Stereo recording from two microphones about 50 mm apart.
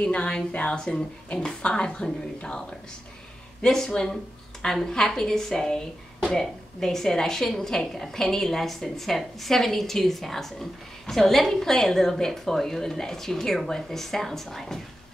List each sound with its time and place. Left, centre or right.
0.0 s speech: left
0.7 s a woman's voice: centre
3.6 s a woman's voice: centre